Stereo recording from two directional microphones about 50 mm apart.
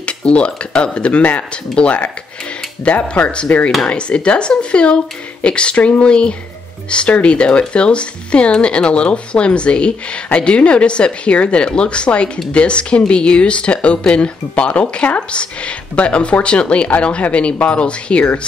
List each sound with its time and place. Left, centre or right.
0.0 s speech: left